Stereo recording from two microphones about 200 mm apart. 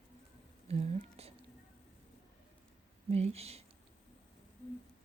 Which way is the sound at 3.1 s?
30° right (ahead or behind).